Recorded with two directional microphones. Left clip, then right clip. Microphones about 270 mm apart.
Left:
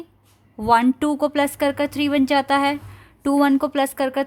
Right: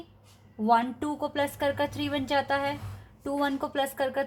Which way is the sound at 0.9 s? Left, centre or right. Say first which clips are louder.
Left 9 dB; left.